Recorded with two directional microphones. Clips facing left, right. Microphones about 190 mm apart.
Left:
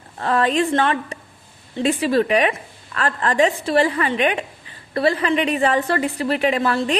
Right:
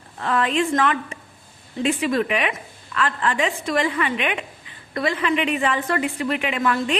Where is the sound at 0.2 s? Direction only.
40° left (ahead or behind).